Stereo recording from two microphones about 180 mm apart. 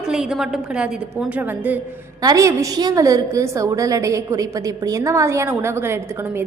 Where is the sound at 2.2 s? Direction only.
20° right (ahead or behind).